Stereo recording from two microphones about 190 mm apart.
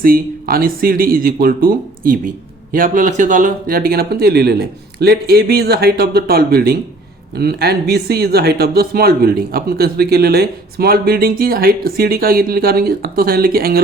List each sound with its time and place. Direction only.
0.0 s speech: 50° right (ahead or behind)